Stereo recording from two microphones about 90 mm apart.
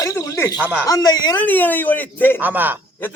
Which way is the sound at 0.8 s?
45° left (ahead or behind).